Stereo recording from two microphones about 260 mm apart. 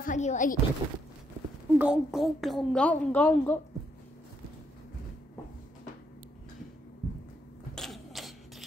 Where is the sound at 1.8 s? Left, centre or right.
Centre.